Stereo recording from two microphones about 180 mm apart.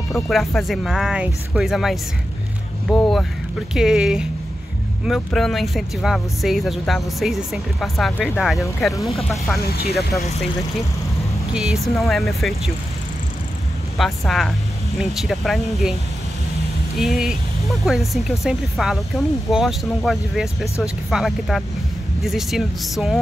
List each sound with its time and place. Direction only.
0.1 s speech: centre (ahead or behind)
9.6 s speech: 60° left (ahead or behind)
11.5 s speech: centre (ahead or behind)
13.9 s speech: centre (ahead or behind)